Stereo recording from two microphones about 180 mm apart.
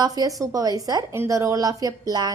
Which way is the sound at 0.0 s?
20° right (ahead or behind).